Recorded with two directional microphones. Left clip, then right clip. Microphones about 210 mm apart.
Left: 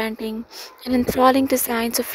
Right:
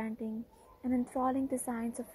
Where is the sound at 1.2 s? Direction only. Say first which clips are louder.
Left 19 dB; 45° left (ahead or behind).